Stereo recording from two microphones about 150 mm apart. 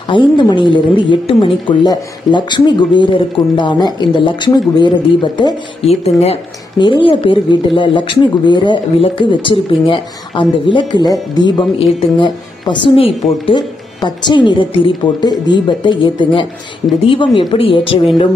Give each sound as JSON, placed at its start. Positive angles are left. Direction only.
{"t": 0.1, "sound": "a woman's voice", "side_deg": 30}